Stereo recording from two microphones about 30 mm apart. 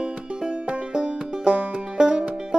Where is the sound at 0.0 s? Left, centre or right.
Right.